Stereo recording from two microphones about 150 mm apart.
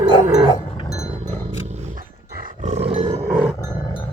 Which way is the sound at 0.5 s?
25° left (ahead or behind).